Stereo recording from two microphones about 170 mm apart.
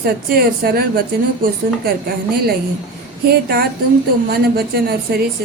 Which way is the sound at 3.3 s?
65° right (ahead or behind).